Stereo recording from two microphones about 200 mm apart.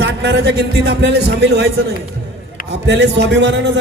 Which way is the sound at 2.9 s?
60° right (ahead or behind).